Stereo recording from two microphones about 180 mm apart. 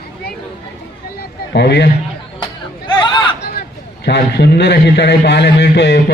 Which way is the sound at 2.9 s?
25° left (ahead or behind).